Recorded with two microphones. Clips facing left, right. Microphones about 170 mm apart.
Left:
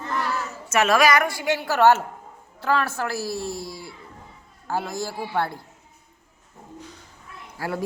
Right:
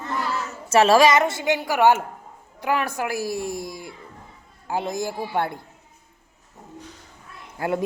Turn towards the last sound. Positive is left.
turn(degrees=-20)  # may be behind; listen again after turning